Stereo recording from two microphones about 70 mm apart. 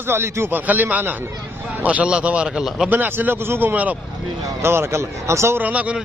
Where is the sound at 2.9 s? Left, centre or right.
Right.